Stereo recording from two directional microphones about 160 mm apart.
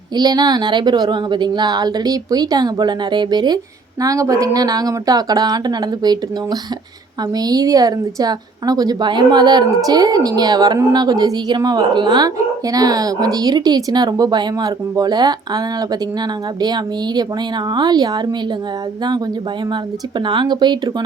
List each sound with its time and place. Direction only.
0.2 s a woman's voice: 25° right (ahead or behind)
19.7 s a woman's voice: 30° right (ahead or behind)